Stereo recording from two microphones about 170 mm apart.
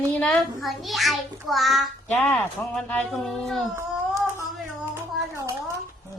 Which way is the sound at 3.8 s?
15° right (ahead or behind).